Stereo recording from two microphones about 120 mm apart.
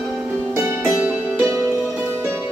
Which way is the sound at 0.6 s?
25° right (ahead or behind).